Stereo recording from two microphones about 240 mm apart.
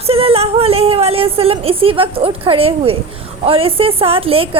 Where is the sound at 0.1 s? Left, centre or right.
Right.